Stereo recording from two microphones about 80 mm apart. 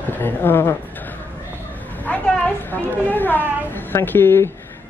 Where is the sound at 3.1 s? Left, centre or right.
Left.